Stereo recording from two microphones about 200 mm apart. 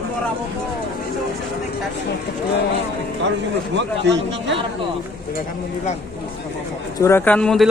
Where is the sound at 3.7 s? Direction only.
60° right (ahead or behind).